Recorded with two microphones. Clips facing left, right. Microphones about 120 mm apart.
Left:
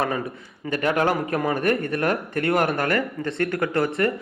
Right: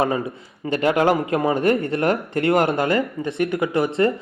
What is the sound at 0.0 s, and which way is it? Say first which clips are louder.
A man's voice: right 4 dB; 25° right (ahead or behind).